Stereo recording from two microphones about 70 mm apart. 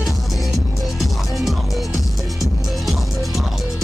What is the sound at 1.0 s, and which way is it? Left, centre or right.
Music, centre.